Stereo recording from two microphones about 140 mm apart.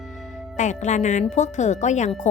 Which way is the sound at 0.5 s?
60° left (ahead or behind).